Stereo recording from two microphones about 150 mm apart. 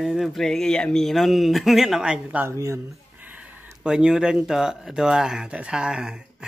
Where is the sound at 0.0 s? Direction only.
Centre (ahead or behind).